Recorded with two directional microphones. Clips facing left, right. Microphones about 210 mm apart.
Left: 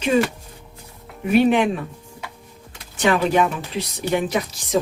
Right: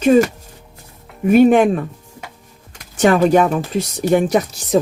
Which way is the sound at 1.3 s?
45° right (ahead or behind).